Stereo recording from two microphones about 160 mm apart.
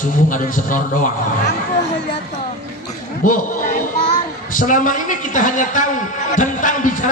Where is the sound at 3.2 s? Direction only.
55° left (ahead or behind).